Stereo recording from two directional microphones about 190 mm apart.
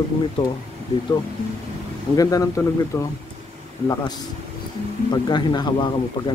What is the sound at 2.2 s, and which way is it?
Speech, 20° left (ahead or behind).